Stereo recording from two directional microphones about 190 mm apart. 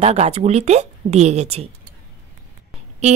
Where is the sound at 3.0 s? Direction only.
35° right (ahead or behind).